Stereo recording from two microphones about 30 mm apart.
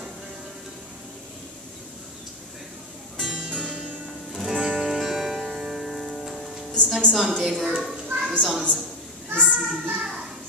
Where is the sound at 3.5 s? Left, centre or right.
Right.